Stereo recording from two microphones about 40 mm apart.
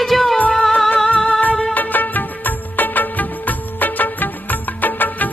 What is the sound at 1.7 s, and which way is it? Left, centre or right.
Music of bollywood, left.